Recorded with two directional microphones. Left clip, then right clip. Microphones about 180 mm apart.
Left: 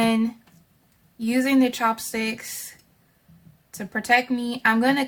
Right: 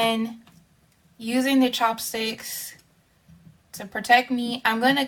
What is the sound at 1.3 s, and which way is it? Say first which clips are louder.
Speech: left 1 dB; 40° left (ahead or behind).